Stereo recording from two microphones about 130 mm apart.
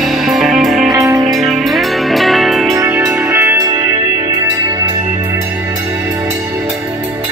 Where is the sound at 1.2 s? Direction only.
Centre (ahead or behind).